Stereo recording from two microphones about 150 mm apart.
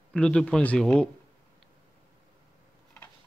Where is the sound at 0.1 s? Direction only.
5° left (ahead or behind).